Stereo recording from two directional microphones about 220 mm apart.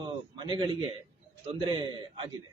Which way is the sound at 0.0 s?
20° right (ahead or behind).